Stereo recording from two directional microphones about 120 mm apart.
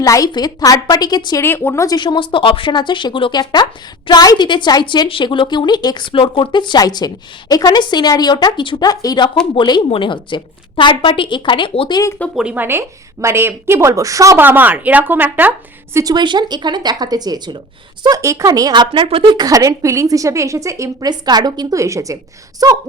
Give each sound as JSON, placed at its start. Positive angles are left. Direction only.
{"t": 0.0, "sound": "speech", "side_deg": 30}
{"t": 1.4, "sound": "speech", "side_deg": 20}
{"t": 2.0, "sound": "a woman's voice", "side_deg": 40}
{"t": 12.4, "sound": "speech", "side_deg": -10}
{"t": 13.2, "sound": "speech", "side_deg": -20}
{"t": 16.1, "sound": "a woman's voice", "side_deg": -40}